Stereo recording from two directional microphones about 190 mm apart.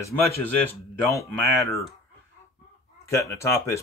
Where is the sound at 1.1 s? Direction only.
15° left (ahead or behind).